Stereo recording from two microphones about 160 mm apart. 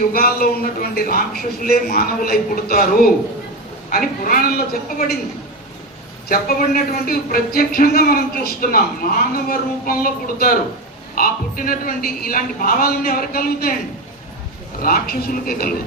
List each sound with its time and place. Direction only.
0.1 s a woman's voice: 65° left (ahead or behind)
6.2 s a woman's voice: 65° left (ahead or behind)
14.8 s speech: 65° left (ahead or behind)